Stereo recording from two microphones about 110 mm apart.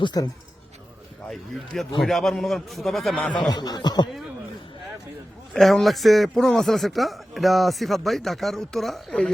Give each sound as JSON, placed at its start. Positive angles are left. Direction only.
{"t": 0.0, "sound": "speech", "side_deg": 40}
{"t": 1.3, "sound": "speech", "side_deg": 0}
{"t": 3.3, "sound": "speech", "side_deg": 35}
{"t": 5.5, "sound": "speech", "side_deg": 0}